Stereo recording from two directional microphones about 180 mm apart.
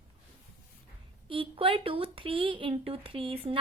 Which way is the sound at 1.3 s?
30° right (ahead or behind).